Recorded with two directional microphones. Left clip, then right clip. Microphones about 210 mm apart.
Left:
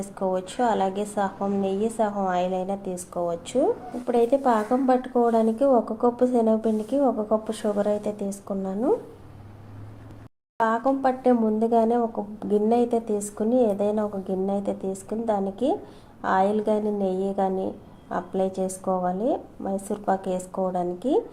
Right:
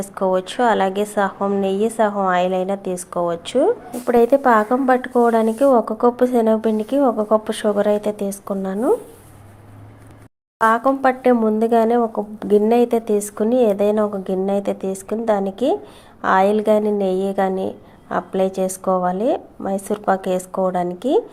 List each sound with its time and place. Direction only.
0.0 s a woman's voice: 20° right (ahead or behind)
10.6 s a woman's voice: 20° right (ahead or behind)